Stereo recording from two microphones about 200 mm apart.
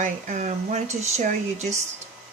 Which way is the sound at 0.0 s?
40° right (ahead or behind).